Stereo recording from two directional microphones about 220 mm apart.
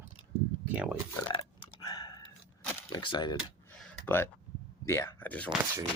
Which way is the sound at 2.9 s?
20° left (ahead or behind).